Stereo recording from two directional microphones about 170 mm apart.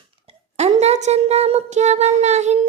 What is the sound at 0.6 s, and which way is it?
Speech, 40° right (ahead or behind).